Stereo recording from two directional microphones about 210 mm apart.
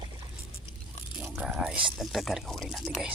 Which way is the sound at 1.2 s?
5° right (ahead or behind).